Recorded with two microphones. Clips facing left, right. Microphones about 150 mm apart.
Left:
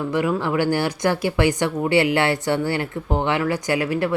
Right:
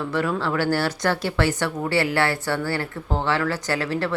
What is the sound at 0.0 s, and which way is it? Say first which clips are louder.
Speech: left 3 dB; 15° left (ahead or behind).